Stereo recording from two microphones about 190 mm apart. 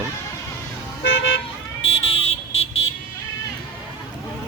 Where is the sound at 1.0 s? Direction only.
75° left (ahead or behind).